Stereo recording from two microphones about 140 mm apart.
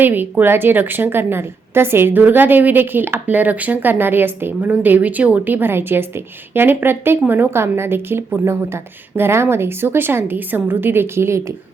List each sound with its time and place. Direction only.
0.0 s a woman's voice: 15° right (ahead or behind)